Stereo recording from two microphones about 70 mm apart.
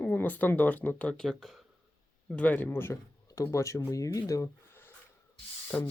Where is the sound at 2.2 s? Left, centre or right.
Centre.